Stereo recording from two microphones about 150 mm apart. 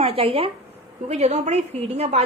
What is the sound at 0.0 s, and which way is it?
A woman's voice, 40° right (ahead or behind).